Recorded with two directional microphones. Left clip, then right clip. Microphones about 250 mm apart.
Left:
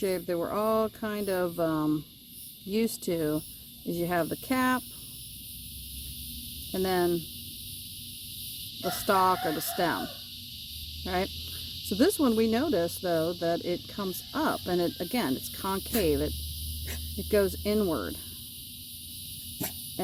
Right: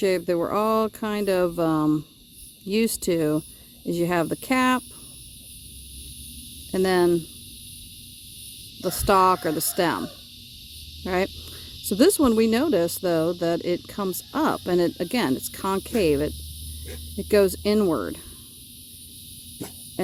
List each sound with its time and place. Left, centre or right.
0.0 s insect: right
6.7 s insect: right
8.8 s insect: right